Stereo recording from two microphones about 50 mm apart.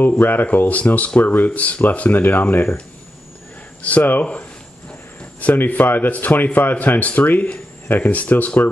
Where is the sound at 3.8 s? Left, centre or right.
Left.